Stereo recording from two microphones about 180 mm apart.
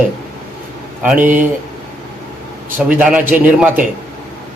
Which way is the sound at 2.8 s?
10° right (ahead or behind).